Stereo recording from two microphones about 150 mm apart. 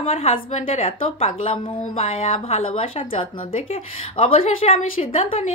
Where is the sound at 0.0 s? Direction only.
40° left (ahead or behind).